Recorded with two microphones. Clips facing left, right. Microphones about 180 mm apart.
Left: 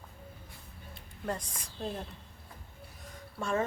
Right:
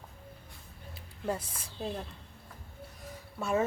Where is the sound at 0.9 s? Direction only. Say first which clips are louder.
Right 2 dB; 5° right (ahead or behind).